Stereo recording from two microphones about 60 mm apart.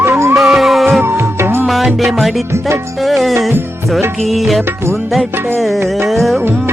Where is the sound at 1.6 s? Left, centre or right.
Centre.